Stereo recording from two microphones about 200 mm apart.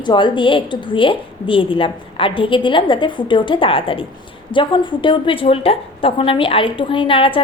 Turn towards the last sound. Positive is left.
turn(degrees=25)  # may be behind; listen again after turning